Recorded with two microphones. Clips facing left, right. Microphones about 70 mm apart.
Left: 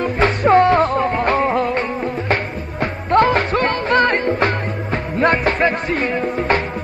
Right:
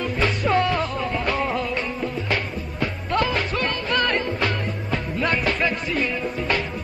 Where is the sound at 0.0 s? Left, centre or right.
Left.